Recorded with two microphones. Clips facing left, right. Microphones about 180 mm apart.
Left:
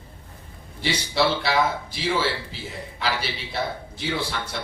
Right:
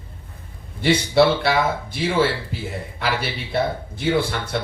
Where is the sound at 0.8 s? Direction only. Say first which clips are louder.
Right 7 dB; 55° right (ahead or behind).